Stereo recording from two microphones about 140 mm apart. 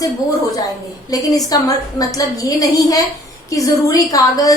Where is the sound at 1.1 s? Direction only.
25° left (ahead or behind).